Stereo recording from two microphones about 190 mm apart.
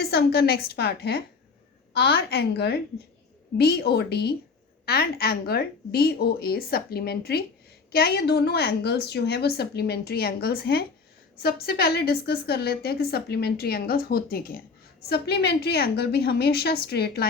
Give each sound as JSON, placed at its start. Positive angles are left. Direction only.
{"t": 0.0, "sound": "a woman's voice", "side_deg": 60}